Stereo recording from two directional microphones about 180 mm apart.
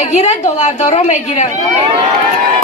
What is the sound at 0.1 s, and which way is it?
A woman's voice, 40° left (ahead or behind).